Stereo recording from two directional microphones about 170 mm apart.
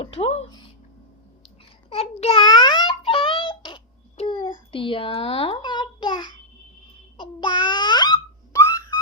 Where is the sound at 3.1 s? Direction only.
30° left (ahead or behind).